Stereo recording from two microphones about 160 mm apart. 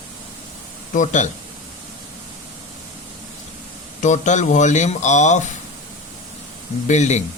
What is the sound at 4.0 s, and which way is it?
A man's voice, 50° left (ahead or behind).